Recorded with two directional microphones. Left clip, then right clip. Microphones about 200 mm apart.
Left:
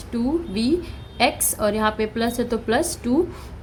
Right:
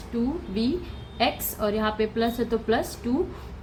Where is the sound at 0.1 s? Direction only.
30° left (ahead or behind).